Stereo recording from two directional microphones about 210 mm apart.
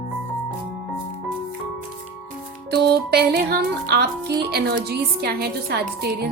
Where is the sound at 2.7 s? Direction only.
50° right (ahead or behind).